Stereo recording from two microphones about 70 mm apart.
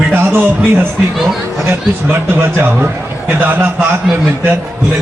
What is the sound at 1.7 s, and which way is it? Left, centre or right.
A man's voice, right.